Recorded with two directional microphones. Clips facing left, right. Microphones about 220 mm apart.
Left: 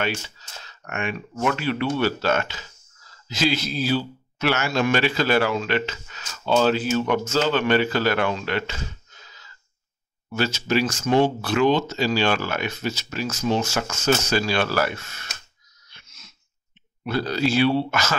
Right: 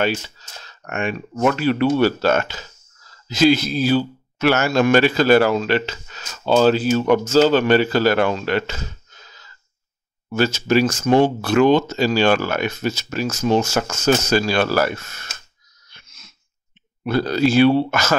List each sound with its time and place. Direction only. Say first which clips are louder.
0.7 s speech: right 4 dB; 40° right (ahead or behind)
9.2 s a sound: right 2 dB; 40° right (ahead or behind)
10.3 s speech: right 5 dB; 45° right (ahead or behind)
17.0 s speech: right 5 dB; 50° right (ahead or behind)